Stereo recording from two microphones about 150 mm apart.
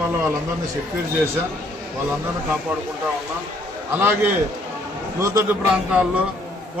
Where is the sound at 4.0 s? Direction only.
15° right (ahead or behind).